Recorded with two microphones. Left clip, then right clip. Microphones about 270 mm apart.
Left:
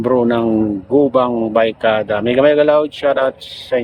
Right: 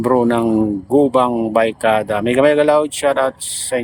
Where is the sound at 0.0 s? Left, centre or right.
Centre.